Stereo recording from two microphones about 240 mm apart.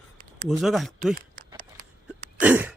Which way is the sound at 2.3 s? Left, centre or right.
Centre.